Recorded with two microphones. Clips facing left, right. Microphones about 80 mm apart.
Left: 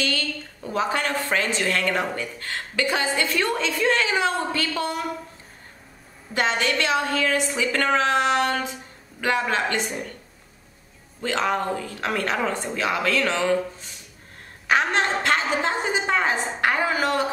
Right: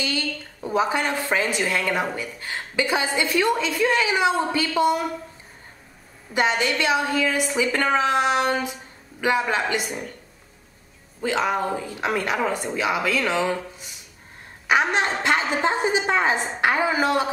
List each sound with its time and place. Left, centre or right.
0.0 s a woman's voice: centre
6.6 s a woman's voice: centre
11.1 s a woman's voice: centre